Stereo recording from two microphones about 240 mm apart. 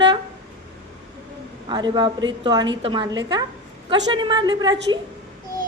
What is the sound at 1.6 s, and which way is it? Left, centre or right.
A woman's voice, centre.